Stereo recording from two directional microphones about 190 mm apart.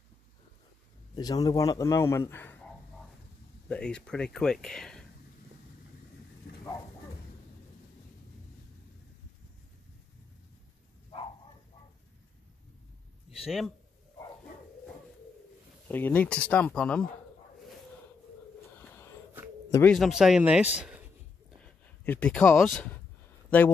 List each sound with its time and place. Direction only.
1.1 s a man's voice: 20° left (ahead or behind); by 5.0 s 5° left (ahead or behind)
6.5 s a sound: 55° left (ahead or behind)
13.4 s a man's voice: centre (ahead or behind)
15.9 s a man's voice: 10° left (ahead or behind)
19.7 s speech: 5° left (ahead or behind)
21.6 s speech: 10° left (ahead or behind)